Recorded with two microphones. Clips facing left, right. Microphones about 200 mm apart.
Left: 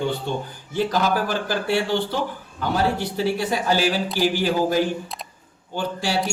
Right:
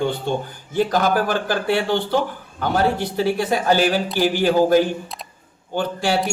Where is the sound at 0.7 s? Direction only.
50° right (ahead or behind).